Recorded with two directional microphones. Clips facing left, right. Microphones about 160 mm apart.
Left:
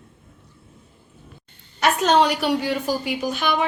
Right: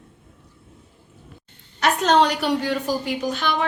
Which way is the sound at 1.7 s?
5° left (ahead or behind).